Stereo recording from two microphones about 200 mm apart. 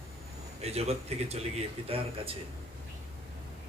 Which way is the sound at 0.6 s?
30° right (ahead or behind).